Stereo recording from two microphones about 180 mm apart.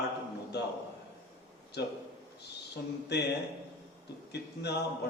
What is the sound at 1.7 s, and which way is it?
Speech, 70° left (ahead or behind).